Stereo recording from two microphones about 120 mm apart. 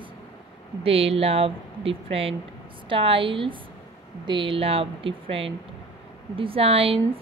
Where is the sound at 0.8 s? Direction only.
55° right (ahead or behind).